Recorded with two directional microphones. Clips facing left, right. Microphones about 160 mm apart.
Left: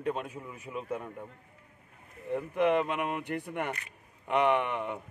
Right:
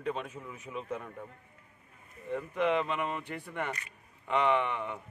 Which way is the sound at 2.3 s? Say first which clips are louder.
Left 3 dB; 10° left (ahead or behind).